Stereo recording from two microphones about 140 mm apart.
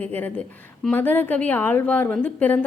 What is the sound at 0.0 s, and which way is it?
A woman's voice, 15° left (ahead or behind).